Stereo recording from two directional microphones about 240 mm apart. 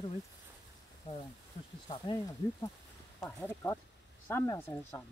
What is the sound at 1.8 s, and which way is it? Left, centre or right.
Speech, centre.